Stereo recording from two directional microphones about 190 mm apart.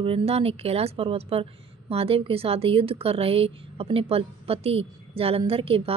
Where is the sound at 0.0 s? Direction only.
30° right (ahead or behind).